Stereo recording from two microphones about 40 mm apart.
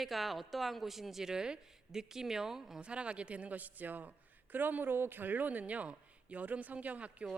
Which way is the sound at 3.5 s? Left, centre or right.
Right.